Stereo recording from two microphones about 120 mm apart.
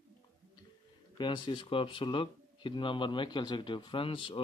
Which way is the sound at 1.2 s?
40° left (ahead or behind).